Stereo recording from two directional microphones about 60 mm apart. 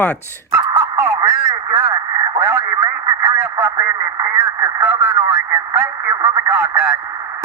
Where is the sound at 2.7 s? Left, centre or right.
Right.